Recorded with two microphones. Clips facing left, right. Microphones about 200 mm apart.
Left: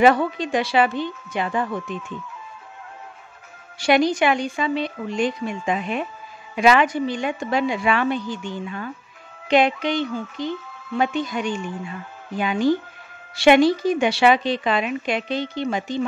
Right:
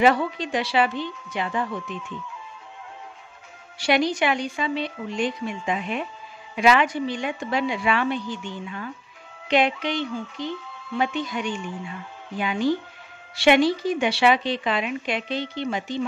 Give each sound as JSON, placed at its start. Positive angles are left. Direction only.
{"t": 0.0, "sound": "a woman's voice", "side_deg": 50}
{"t": 3.8, "sound": "a woman's voice", "side_deg": 45}